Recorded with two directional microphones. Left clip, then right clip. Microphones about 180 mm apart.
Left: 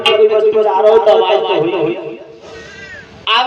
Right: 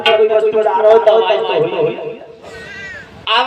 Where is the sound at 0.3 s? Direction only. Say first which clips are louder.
Left 1 dB; 30° left (ahead or behind).